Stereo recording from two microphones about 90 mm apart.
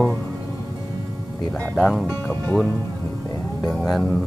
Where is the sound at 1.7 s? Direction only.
Centre (ahead or behind).